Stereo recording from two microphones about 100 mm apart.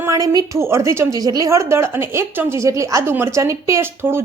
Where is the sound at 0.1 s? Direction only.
35° right (ahead or behind).